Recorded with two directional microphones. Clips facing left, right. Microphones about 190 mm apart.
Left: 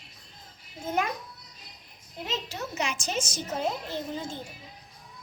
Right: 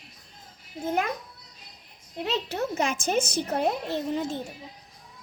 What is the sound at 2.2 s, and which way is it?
A child's voice, 65° right (ahead or behind).